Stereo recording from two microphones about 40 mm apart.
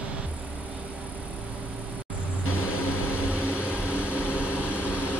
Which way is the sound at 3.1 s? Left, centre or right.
Right.